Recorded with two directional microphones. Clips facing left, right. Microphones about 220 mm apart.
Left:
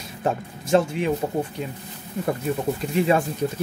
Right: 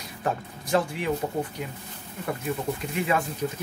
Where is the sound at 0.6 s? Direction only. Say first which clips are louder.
Left 5 dB; 25° left (ahead or behind).